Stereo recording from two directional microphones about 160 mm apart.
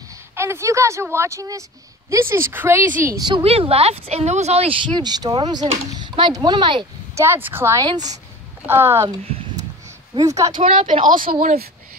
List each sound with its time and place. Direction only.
0.4 s a woman's voice: 15° right (ahead or behind)
3.4 s speech: 40° right (ahead or behind)
4.9 s speech: 25° right (ahead or behind)
7.2 s a woman's voice: 15° right (ahead or behind)
7.8 s speech: 25° right (ahead or behind)
8.6 s a woman's voice: 15° right (ahead or behind)
9.2 s a sound: 40° right (ahead or behind)
10.1 s speech: 20° right (ahead or behind)
10.6 s speech: 35° right (ahead or behind)